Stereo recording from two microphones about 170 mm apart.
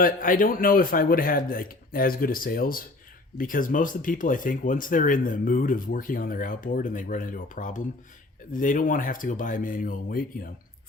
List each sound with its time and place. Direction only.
0.0 s a man's voice: 55° left (ahead or behind)